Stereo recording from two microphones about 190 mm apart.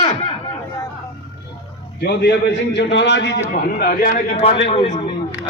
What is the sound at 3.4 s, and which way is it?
Speech, 50° left (ahead or behind).